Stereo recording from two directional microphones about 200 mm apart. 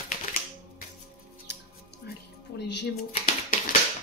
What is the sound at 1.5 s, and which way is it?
Music, 60° left (ahead or behind).